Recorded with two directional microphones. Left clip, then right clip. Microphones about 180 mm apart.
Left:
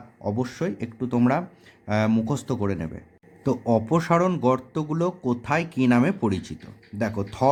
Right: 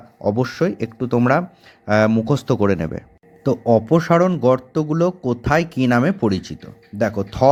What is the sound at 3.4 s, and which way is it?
Speech, 20° right (ahead or behind).